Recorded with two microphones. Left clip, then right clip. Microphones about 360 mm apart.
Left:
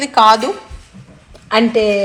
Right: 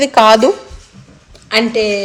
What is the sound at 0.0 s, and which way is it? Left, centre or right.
Speech, right.